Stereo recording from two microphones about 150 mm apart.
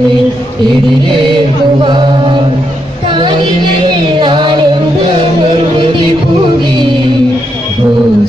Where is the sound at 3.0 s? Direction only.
30° right (ahead or behind).